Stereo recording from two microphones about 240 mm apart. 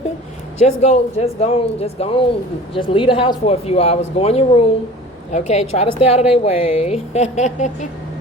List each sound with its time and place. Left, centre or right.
0.6 s a woman's voice: left